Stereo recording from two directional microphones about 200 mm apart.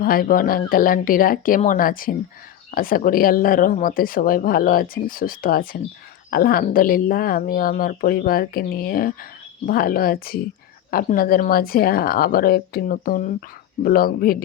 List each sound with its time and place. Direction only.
0.0 s speech: 45° left (ahead or behind)